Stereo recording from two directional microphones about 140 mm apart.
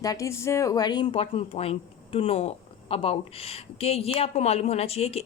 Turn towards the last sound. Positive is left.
turn(degrees=45)  # may be behind; listen again after turning